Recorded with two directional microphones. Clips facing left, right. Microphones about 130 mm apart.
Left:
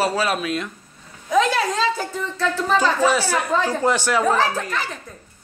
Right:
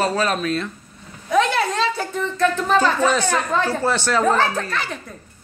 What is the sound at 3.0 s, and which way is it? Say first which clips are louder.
A woman's voice: even; 10° left (ahead or behind).